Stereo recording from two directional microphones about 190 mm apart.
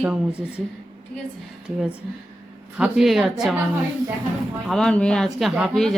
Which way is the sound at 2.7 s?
5° right (ahead or behind).